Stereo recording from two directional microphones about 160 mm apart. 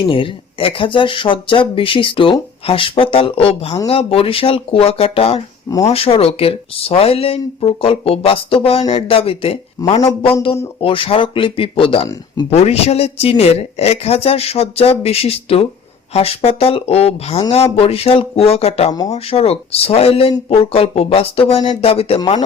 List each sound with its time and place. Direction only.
0.0 s speech: 35° left (ahead or behind)